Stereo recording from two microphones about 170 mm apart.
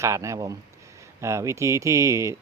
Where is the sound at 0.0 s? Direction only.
15° right (ahead or behind).